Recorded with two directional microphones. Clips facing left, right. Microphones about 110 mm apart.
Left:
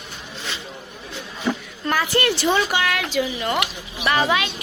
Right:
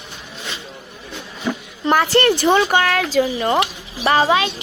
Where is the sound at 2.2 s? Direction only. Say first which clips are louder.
Right 5 dB; 50° right (ahead or behind).